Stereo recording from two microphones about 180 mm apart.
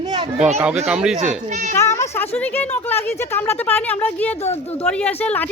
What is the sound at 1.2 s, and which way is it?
Speech, 40° right (ahead or behind).